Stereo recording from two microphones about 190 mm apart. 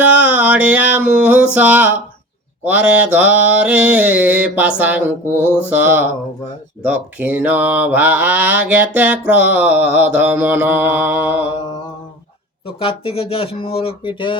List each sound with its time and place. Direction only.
0.0 s a sound: 10° right (ahead or behind)
1.5 s mantra: 10° right (ahead or behind)
12.6 s speech: 30° left (ahead or behind)